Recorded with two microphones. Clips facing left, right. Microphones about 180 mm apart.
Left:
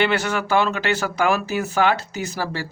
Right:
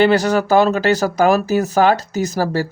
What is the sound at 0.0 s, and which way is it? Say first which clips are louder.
Speech: right 7 dB; 35° right (ahead or behind).